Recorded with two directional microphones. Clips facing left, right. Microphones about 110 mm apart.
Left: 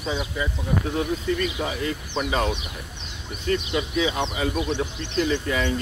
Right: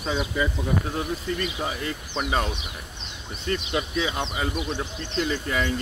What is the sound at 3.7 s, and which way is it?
Speech, 40° right (ahead or behind).